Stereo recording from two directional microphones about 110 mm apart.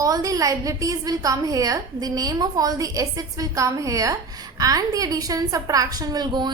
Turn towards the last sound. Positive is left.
turn(degrees=-40)  # may be behind; listen again after turning